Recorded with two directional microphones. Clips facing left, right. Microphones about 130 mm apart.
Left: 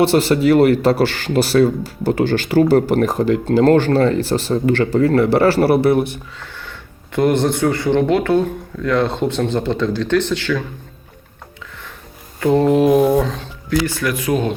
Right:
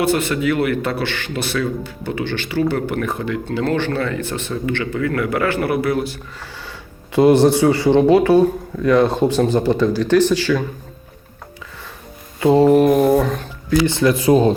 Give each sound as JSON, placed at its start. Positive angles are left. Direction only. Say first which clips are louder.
{"t": 0.0, "sound": "speech", "louder": "left 4 dB", "side_deg": 35}
{"t": 7.1, "sound": "speech", "louder": "right 4 dB", "side_deg": -15}
{"t": 12.4, "sound": "speech", "louder": "right 2 dB", "side_deg": -15}
{"t": 12.7, "sound": "speech", "louder": "even", "side_deg": 0}
{"t": 13.8, "sound": "speech", "louder": "right 5 dB", "side_deg": -25}